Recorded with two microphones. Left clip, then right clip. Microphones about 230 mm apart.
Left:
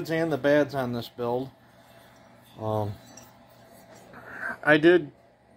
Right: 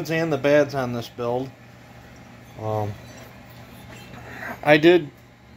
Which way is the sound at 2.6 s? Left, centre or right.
Left.